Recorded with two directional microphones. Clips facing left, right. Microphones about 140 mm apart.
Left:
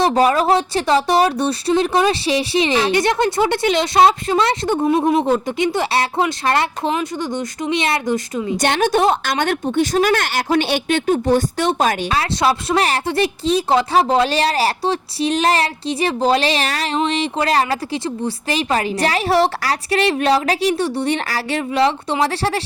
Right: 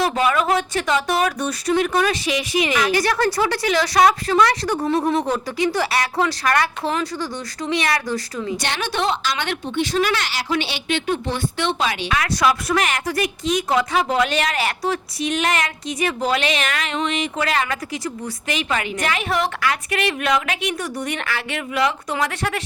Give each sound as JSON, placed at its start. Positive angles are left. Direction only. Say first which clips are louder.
{"t": 0.0, "sound": "speech", "louder": "left 4 dB", "side_deg": 35}
{"t": 8.6, "sound": "a woman's voice", "louder": "left 9 dB", "side_deg": 50}
{"t": 12.1, "sound": "speech", "louder": "left 2 dB", "side_deg": 30}